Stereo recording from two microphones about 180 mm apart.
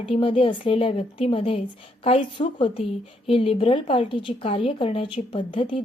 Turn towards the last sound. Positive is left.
turn(degrees=30)  # may be behind; listen again after turning